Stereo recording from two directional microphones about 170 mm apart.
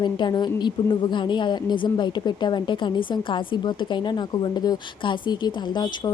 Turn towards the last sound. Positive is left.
turn(degrees=25)  # may be behind; listen again after turning